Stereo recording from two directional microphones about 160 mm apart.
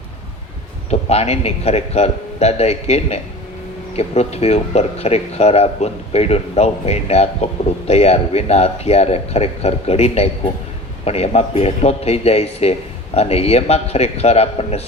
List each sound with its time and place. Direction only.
0.9 s speech: 40° left (ahead or behind)